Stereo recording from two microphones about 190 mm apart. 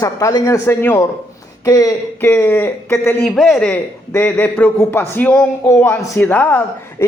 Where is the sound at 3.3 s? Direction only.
Centre (ahead or behind).